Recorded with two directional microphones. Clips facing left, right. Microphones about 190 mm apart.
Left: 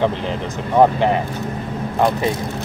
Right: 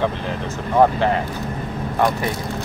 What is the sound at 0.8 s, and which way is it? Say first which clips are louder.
Speech: left 2 dB; 15° left (ahead or behind).